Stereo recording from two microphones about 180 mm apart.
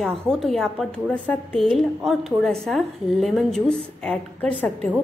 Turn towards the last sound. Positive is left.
turn(degrees=10)  # may be behind; listen again after turning